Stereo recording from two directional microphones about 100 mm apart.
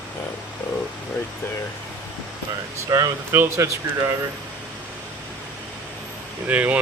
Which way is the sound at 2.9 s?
35° right (ahead or behind).